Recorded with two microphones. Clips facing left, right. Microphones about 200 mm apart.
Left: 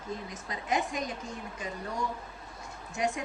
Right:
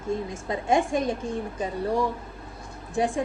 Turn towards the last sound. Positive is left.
turn(degrees=-30)  # may be behind; listen again after turning